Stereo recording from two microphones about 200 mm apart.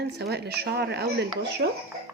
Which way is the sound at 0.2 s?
55° right (ahead or behind).